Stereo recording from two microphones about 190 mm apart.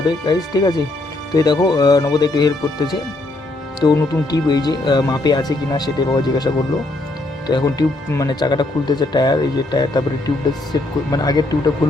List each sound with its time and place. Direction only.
0.3 s speech: 20° left (ahead or behind)